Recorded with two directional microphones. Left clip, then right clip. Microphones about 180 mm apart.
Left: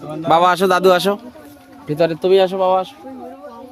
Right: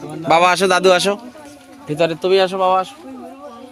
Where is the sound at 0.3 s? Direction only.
20° left (ahead or behind).